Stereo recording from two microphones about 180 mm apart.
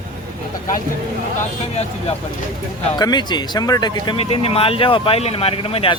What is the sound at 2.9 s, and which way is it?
Speech, 20° left (ahead or behind).